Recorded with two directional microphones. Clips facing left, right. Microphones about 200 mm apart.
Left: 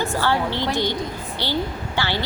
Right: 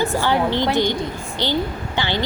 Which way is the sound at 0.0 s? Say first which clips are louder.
Right 3 dB; 15° right (ahead or behind).